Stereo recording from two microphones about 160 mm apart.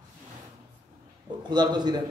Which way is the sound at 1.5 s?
25° right (ahead or behind).